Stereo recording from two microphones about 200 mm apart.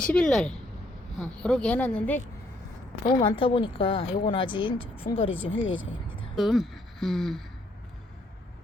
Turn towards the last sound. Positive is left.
turn(degrees=0)  # may be behind; listen again after turning